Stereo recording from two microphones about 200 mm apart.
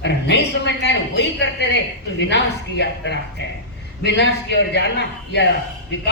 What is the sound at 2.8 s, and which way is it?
A man's voice, 60° left (ahead or behind).